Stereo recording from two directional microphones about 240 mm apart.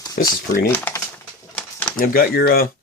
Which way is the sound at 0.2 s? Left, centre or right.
Left.